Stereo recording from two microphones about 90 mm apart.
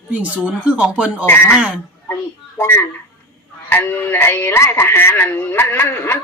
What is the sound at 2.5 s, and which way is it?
Speech, 25° left (ahead or behind).